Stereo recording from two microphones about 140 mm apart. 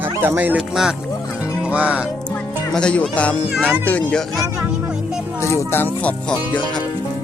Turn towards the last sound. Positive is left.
turn(degrees=10)  # may be behind; listen again after turning